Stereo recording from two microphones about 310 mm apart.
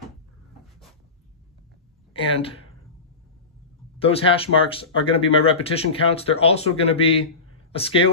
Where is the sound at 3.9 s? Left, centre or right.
Centre.